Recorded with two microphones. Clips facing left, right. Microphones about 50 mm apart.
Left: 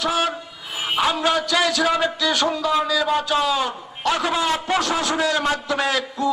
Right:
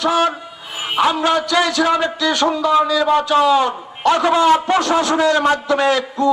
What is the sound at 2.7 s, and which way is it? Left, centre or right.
A man's voice, centre.